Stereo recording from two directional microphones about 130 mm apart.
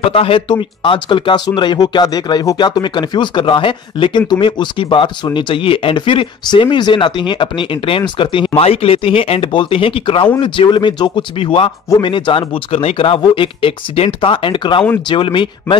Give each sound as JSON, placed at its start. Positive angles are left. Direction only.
{"t": 0.1, "sound": "speech", "side_deg": 45}